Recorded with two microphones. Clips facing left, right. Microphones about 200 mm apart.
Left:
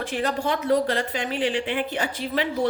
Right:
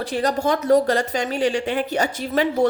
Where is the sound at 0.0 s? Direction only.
40° right (ahead or behind).